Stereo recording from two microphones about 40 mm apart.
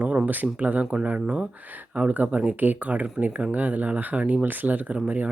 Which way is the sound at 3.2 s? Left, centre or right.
Right.